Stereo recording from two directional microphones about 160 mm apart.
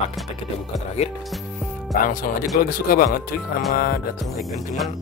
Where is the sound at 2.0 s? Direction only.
60° left (ahead or behind).